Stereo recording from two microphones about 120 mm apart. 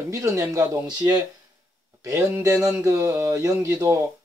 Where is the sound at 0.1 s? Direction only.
25° right (ahead or behind).